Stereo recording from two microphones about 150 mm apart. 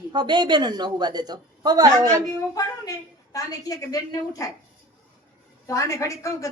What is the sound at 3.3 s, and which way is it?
A woman's voice, 25° left (ahead or behind).